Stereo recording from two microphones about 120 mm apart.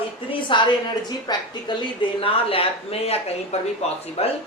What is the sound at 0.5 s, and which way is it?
Speech, 45° left (ahead or behind).